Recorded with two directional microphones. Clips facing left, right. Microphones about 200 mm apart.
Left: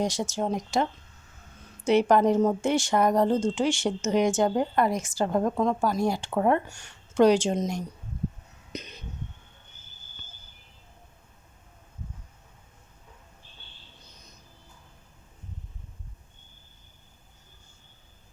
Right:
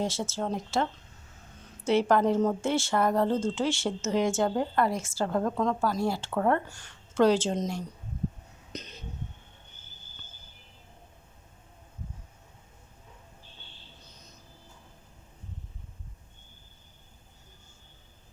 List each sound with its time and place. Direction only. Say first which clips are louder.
0.0 s a woman's voice: left 3 dB; 15° left (ahead or behind)
1.9 s a woman's voice: left 3 dB; 15° left (ahead or behind)
8.7 s a sound: left 3 dB; 10° left (ahead or behind)